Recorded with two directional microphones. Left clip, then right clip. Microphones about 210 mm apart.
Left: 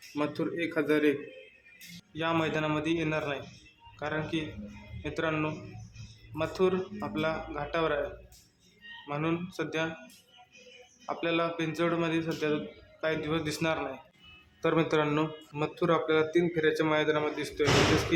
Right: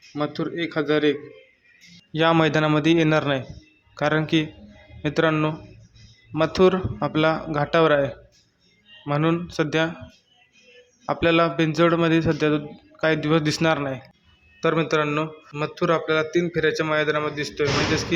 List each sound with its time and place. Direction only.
0.2 s a man's voice: 20° right (ahead or behind)
2.1 s a man's voice: 35° right (ahead or behind)
9.0 s a man's voice: 30° right (ahead or behind)
11.0 s a man's voice: 35° right (ahead or behind)
14.6 s speech: 15° right (ahead or behind)